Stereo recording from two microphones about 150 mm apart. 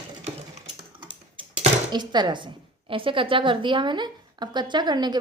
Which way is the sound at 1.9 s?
30° right (ahead or behind).